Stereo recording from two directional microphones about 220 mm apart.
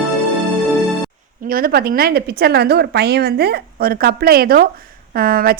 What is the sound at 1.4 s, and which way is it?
A woman's voice, 40° right (ahead or behind).